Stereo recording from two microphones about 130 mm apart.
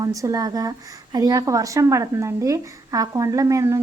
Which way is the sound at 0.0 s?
25° right (ahead or behind).